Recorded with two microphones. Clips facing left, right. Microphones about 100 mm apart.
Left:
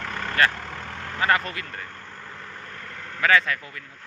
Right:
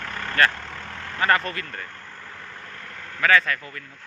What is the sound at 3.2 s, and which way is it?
Speech, 20° left (ahead or behind).